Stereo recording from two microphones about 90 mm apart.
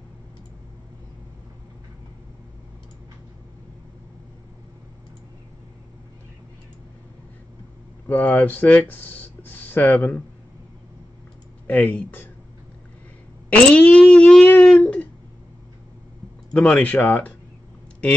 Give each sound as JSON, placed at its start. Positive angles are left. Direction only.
{"t": 8.1, "sound": "speech", "side_deg": 15}
{"t": 11.6, "sound": "speech", "side_deg": 15}
{"t": 13.5, "sound": "a sound", "side_deg": 15}
{"t": 16.5, "sound": "speech", "side_deg": 15}